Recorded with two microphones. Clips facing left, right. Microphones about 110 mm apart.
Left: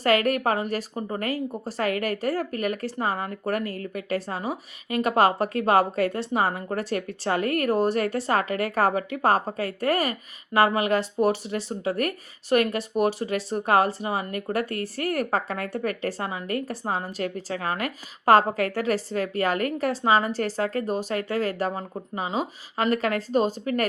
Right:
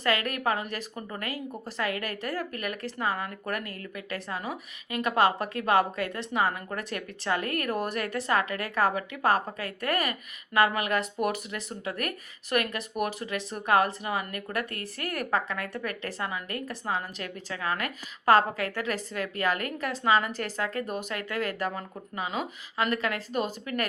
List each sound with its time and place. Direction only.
0.0 s speech: 35° left (ahead or behind)